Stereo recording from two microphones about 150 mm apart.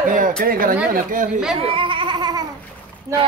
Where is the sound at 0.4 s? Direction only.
70° right (ahead or behind).